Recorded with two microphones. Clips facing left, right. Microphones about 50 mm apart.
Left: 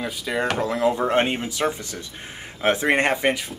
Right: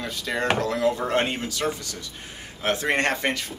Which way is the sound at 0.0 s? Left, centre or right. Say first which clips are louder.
Left 2 dB; centre.